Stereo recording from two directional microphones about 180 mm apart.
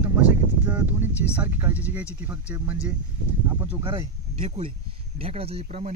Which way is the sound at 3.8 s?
30° right (ahead or behind).